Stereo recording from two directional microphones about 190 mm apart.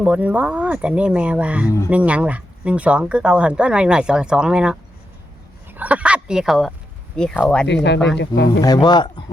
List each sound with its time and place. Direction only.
0.0 s speech: 5° right (ahead or behind)
7.7 s speech: 65° left (ahead or behind)
8.6 s speech: 20° left (ahead or behind)